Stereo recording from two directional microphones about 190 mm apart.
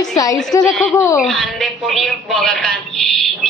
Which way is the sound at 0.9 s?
15° left (ahead or behind).